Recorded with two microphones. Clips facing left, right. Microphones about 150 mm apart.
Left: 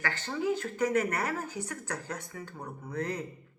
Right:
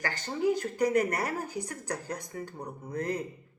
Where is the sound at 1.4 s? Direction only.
10° right (ahead or behind).